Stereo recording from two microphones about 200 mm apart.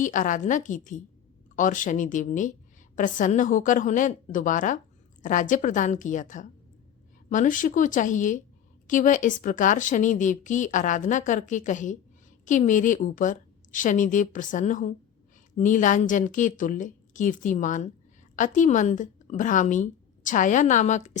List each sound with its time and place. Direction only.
0.0 s a woman's voice: 40° left (ahead or behind)